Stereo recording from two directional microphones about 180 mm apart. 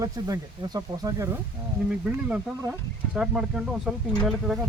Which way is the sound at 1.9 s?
5° right (ahead or behind).